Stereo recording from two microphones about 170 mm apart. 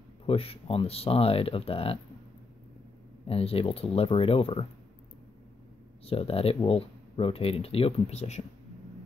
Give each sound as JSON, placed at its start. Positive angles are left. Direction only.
{"t": 0.3, "sound": "speech", "side_deg": 35}
{"t": 3.3, "sound": "speech", "side_deg": 35}
{"t": 6.0, "sound": "speech", "side_deg": 35}